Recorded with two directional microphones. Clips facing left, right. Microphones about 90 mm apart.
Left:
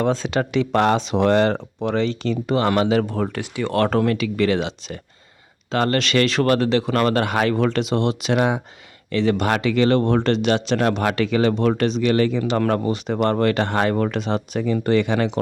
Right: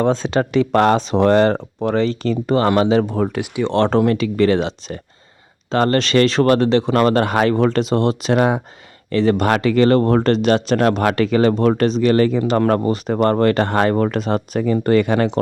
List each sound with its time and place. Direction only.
0.0 s speech: 35° right (ahead or behind)